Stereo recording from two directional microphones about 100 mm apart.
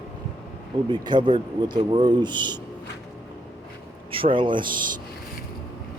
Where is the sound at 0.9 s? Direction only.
50° right (ahead or behind).